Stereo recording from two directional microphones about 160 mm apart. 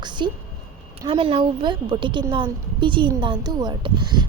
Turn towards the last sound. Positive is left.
turn(degrees=-30)  # may be behind; listen again after turning